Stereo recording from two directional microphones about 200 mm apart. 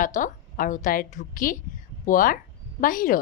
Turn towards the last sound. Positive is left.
turn(degrees=45)  # may be behind; listen again after turning